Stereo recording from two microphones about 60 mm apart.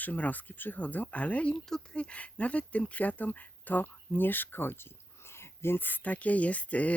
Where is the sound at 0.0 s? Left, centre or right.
Left.